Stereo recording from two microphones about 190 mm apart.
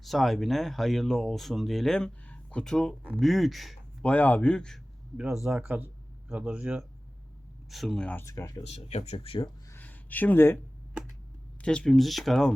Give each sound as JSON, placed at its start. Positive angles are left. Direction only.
{"t": 0.0, "sound": "speech", "side_deg": 0}
{"t": 8.6, "sound": "speech", "side_deg": 35}
{"t": 9.6, "sound": "a sound", "side_deg": 10}
{"t": 11.6, "sound": "speech", "side_deg": 5}